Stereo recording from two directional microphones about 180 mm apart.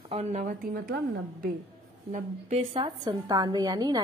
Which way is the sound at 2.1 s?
40° right (ahead or behind).